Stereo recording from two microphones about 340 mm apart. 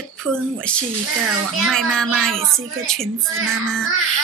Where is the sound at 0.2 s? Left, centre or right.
Centre.